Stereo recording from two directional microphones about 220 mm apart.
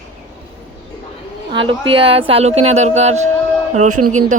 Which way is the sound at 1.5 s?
25° right (ahead or behind).